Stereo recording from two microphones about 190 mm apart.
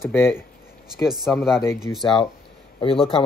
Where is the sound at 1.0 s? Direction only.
Centre (ahead or behind).